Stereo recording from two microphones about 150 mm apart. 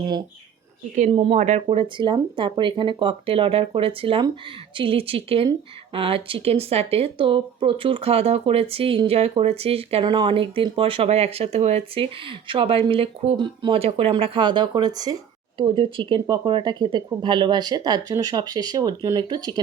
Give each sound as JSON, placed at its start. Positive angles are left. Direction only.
{"t": 1.1, "sound": "speech", "side_deg": -40}
{"t": 1.6, "sound": "speech", "side_deg": -35}
{"t": 15.6, "sound": "speech", "side_deg": -35}